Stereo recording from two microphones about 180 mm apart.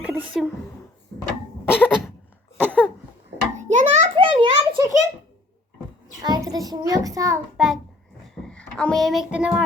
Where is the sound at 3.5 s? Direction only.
40° right (ahead or behind); by 4.9 s 20° right (ahead or behind).